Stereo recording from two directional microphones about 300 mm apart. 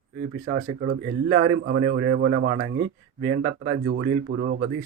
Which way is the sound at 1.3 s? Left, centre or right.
Right.